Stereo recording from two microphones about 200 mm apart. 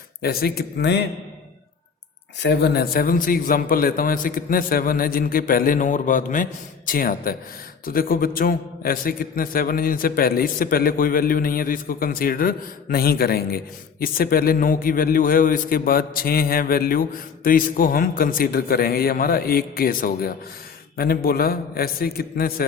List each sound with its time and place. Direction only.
0.2 s a man's voice: 50° left (ahead or behind)
2.4 s a man's voice: 60° left (ahead or behind)